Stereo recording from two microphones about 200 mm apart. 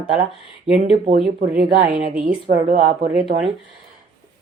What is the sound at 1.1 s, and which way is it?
Speech, 50° right (ahead or behind).